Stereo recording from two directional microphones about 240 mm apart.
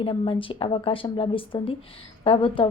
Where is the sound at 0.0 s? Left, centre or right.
Left.